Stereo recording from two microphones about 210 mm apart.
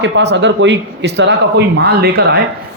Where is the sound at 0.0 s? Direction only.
55° right (ahead or behind).